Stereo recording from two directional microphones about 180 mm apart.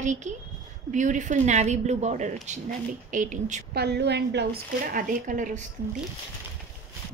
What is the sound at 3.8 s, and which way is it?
A woman's voice, 65° right (ahead or behind).